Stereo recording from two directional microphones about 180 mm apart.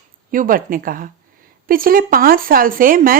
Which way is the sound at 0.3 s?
50° right (ahead or behind).